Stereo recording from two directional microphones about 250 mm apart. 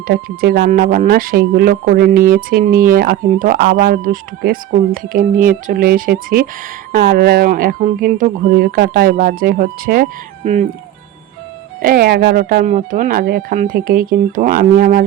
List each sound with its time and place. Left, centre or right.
0.1 s speech: right
11.8 s speech: right